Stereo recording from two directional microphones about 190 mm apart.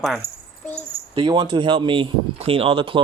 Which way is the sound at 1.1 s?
20° right (ahead or behind).